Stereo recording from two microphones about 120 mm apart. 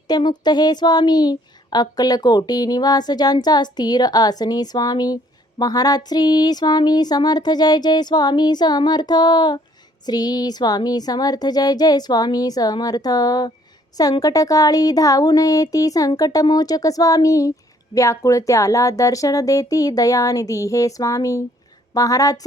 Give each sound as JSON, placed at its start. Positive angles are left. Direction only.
{"t": 0.1, "sound": "a woman's voice", "side_deg": 35}